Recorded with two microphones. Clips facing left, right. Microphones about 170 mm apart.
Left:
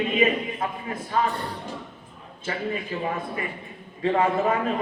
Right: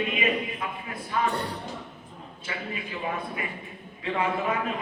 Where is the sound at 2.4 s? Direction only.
45° left (ahead or behind).